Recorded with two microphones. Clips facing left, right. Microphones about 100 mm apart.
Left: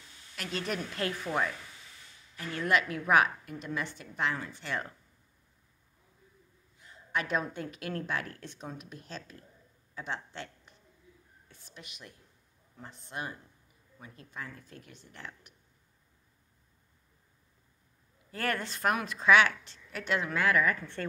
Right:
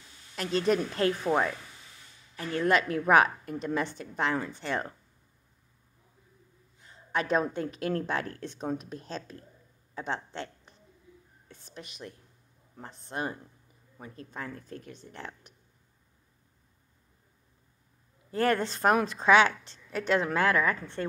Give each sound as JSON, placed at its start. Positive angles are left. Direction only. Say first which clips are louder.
{"t": 0.4, "sound": "a woman's voice", "louder": "right 9 dB", "side_deg": -30}
{"t": 6.8, "sound": "a woman's voice", "louder": "right 3 dB", "side_deg": -30}
{"t": 18.3, "sound": "speech", "louder": "right 7 dB", "side_deg": -30}